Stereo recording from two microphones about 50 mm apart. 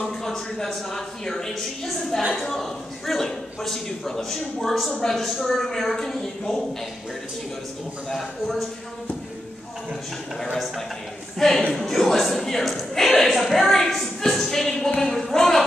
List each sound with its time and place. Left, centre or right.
0.0 s a man's voice: centre
8.1 s a man's voice: centre
10.4 s a man's voice: centre
15.0 s a sound: centre